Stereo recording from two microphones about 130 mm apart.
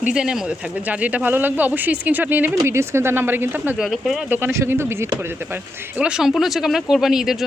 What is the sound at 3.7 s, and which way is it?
Speech, centre (ahead or behind).